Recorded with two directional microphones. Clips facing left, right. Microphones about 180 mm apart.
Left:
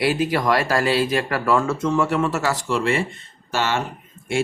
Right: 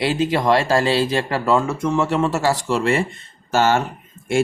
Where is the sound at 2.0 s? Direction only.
25° right (ahead or behind).